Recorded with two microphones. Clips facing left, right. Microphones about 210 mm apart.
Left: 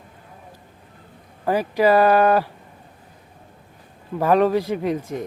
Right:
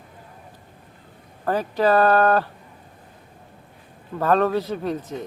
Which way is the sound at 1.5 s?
10° left (ahead or behind).